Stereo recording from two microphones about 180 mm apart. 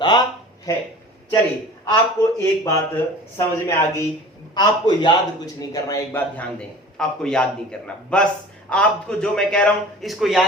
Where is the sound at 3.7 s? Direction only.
15° left (ahead or behind).